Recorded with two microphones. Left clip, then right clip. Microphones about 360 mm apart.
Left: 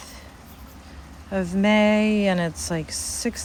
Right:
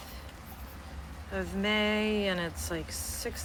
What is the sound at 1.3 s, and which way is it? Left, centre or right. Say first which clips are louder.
Speech: left 9 dB; centre.